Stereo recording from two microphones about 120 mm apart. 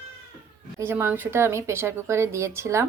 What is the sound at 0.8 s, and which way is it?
Speech, 20° right (ahead or behind).